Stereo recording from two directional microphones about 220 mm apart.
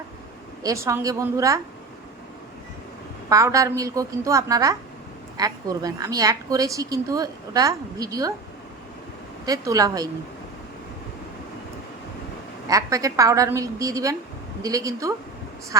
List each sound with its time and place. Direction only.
0.6 s a woman's voice: 15° right (ahead or behind)
3.2 s a woman's voice: 15° right (ahead or behind)
9.5 s a woman's voice: 15° right (ahead or behind)
12.6 s a woman's voice: 15° right (ahead or behind)